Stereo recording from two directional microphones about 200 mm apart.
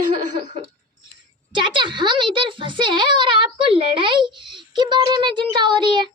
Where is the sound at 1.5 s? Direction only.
25° right (ahead or behind).